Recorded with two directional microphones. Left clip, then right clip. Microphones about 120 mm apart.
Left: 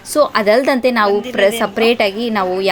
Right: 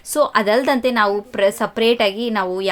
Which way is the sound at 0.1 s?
30° left (ahead or behind).